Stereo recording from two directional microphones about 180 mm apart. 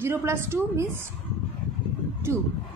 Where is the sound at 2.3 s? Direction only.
15° right (ahead or behind).